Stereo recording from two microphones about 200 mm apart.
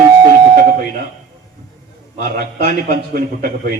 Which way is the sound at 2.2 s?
50° right (ahead or behind).